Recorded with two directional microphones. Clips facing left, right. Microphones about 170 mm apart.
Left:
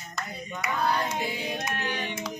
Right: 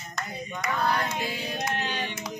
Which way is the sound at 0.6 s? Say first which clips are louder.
Even; 10° left (ahead or behind).